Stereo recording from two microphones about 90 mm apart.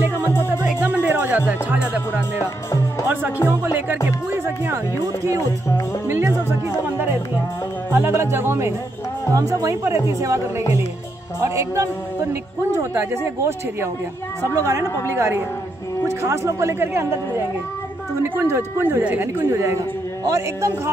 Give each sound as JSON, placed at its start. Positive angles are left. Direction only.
{"t": 0.7, "sound": "music", "side_deg": -20}
{"t": 1.5, "sound": "speech", "side_deg": -15}
{"t": 3.4, "sound": "speech", "side_deg": -20}
{"t": 5.2, "sound": "speech", "side_deg": -40}
{"t": 6.0, "sound": "music", "side_deg": -30}
{"t": 7.9, "sound": "speech", "side_deg": -30}
{"t": 9.3, "sound": "speech", "side_deg": -40}
{"t": 11.4, "sound": "speech", "side_deg": -30}
{"t": 18.2, "sound": "speech", "side_deg": -25}
{"t": 20.2, "sound": "speech", "side_deg": -35}